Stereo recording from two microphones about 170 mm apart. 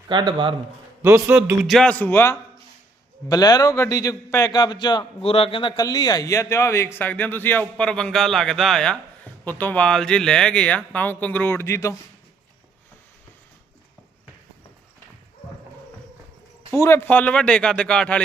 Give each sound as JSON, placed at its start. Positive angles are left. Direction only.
{"t": 0.1, "sound": "speech", "side_deg": -25}
{"t": 1.0, "sound": "a man's voice", "side_deg": -15}
{"t": 1.6, "sound": "a man's voice", "side_deg": 5}
{"t": 16.7, "sound": "speech", "side_deg": 15}